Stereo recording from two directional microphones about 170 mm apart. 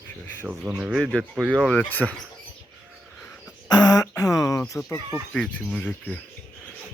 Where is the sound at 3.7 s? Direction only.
20° left (ahead or behind).